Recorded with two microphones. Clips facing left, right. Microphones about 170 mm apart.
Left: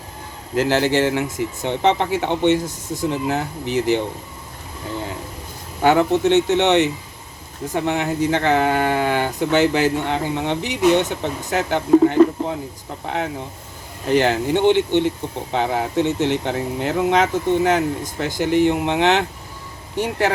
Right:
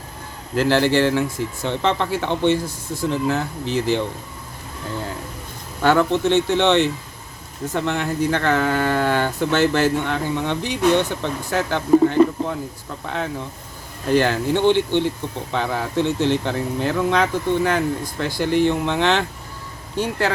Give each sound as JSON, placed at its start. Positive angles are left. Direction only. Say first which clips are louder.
{"t": 0.5, "sound": "speech", "louder": "even", "side_deg": 15}
{"t": 5.8, "sound": "speech", "louder": "left 2 dB", "side_deg": 15}
{"t": 14.1, "sound": "speech", "louder": "left 1 dB", "side_deg": 20}